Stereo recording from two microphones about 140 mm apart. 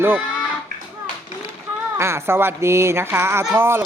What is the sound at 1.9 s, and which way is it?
Speech, 20° right (ahead or behind).